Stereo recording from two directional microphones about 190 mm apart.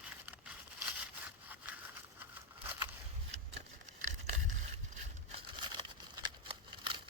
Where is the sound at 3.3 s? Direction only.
35° right (ahead or behind).